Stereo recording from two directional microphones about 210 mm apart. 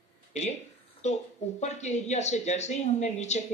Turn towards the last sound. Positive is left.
turn(degrees=30)  # may be behind; listen again after turning